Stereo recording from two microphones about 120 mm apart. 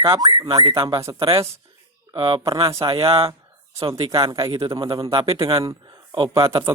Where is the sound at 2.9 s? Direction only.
50° right (ahead or behind).